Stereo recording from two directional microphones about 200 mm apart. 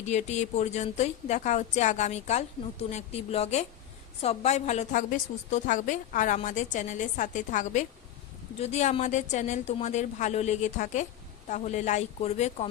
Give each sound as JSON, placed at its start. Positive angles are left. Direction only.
{"t": 0.0, "sound": "a woman's voice", "side_deg": 35}